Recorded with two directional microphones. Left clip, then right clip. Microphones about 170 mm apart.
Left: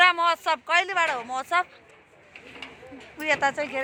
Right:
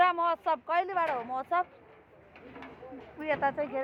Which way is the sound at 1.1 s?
45° left (ahead or behind).